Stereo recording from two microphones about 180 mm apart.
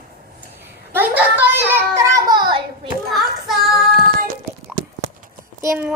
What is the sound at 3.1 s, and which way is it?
Child singing, centre (ahead or behind).